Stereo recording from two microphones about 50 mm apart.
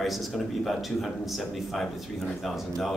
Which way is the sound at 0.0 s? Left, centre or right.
Centre.